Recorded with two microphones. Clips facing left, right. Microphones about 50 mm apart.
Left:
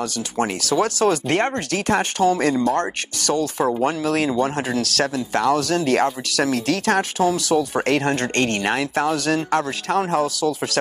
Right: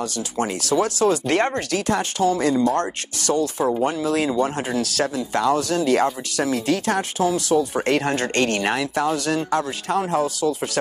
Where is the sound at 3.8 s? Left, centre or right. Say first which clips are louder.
Left 1 dB; left.